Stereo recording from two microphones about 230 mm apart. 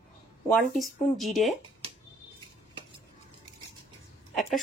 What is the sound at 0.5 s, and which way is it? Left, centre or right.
Speech, centre.